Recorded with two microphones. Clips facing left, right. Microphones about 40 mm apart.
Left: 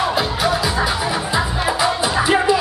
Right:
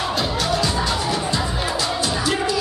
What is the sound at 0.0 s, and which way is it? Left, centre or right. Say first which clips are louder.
Music: left 4 dB; centre.